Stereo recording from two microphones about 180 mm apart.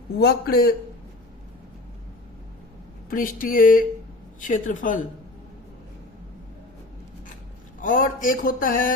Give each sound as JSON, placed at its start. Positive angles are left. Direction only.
{"t": 0.2, "sound": "a man's voice", "side_deg": 60}
{"t": 3.1, "sound": "speech", "side_deg": 50}
{"t": 7.8, "sound": "speech", "side_deg": 50}